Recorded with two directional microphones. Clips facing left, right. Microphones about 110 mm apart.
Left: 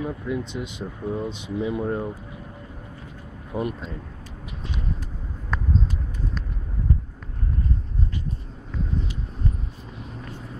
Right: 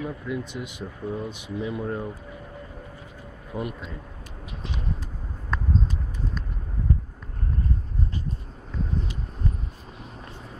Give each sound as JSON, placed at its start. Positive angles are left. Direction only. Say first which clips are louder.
{"t": 0.0, "sound": "speech", "louder": "left 3 dB", "side_deg": 20}
{"t": 3.5, "sound": "speech", "louder": "left 4 dB", "side_deg": 30}